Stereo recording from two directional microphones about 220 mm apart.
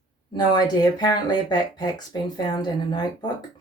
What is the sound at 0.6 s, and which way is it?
Speech, 20° left (ahead or behind).